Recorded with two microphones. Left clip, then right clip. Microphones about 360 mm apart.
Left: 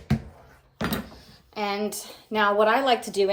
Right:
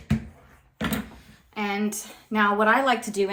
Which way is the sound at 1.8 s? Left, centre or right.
Centre.